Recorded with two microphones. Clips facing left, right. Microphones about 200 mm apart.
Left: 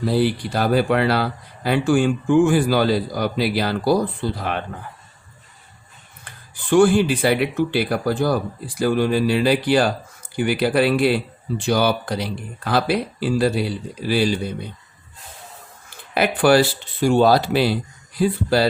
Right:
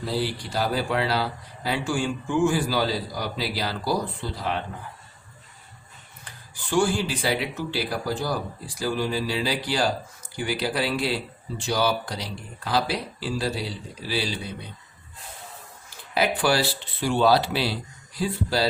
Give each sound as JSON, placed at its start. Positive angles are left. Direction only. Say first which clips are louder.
{"t": 0.1, "sound": "speech", "louder": "left 7 dB", "side_deg": 60}
{"t": 6.2, "sound": "speech", "louder": "left 10 dB", "side_deg": 55}
{"t": 16.1, "sound": "speech", "louder": "left 7 dB", "side_deg": 60}